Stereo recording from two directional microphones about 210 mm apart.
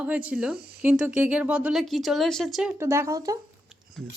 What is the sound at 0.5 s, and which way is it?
Speech, 50° right (ahead or behind).